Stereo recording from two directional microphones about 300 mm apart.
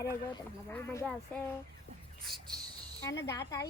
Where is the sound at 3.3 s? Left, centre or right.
Centre.